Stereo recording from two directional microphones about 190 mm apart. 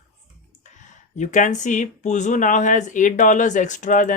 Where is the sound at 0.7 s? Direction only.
40° left (ahead or behind).